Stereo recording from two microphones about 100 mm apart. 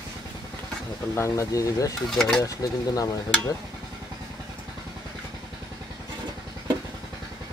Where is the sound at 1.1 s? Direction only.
30° left (ahead or behind).